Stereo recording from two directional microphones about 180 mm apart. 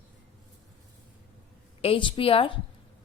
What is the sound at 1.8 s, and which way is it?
Speech, 30° left (ahead or behind).